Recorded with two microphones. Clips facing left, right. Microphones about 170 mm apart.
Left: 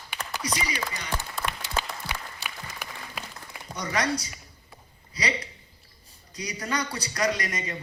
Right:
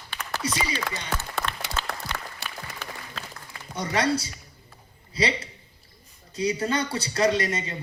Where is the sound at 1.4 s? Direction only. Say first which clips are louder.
Right 2 dB; 65° right (ahead or behind).